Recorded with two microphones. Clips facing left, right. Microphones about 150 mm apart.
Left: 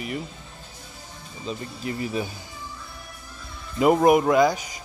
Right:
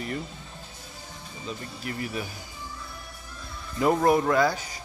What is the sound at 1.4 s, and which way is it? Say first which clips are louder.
Speech: left 5 dB; 25° left (ahead or behind).